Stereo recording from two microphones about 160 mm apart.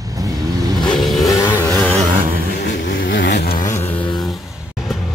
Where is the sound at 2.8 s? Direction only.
90° left.